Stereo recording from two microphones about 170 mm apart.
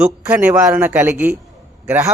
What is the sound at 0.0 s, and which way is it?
Speech, 10° right (ahead or behind).